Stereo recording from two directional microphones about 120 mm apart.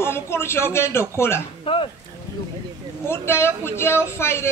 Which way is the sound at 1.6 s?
50° left (ahead or behind).